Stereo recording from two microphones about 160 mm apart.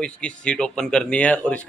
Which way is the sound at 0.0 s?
5° left (ahead or behind).